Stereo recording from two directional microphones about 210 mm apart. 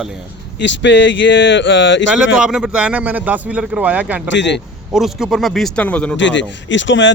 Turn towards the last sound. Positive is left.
turn(degrees=60)  # may be behind; listen again after turning